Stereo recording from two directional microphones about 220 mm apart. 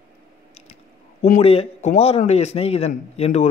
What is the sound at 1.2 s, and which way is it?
A man's voice, 30° left (ahead or behind).